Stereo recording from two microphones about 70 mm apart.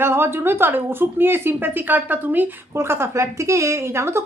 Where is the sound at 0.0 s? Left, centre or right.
Right.